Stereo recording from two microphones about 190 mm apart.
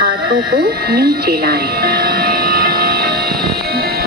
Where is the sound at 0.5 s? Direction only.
55° right (ahead or behind).